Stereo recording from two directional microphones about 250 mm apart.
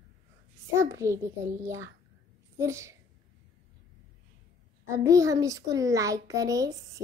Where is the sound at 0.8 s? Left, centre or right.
Centre.